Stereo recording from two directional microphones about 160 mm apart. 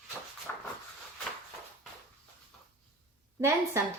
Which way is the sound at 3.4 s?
15° right (ahead or behind).